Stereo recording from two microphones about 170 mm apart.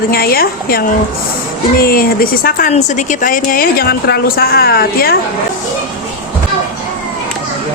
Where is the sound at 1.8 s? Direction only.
60° left (ahead or behind).